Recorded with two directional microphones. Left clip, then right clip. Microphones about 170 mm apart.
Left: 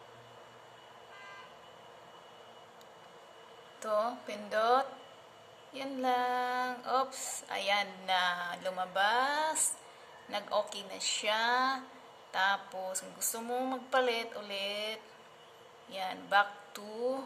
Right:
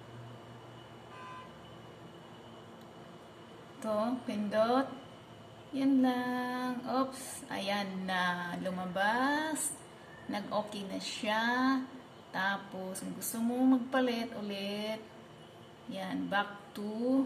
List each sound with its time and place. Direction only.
3.8 s speech: 40° left (ahead or behind)